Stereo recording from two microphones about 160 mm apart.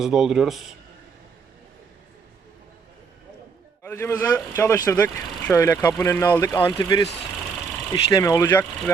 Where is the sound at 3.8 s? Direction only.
15° left (ahead or behind).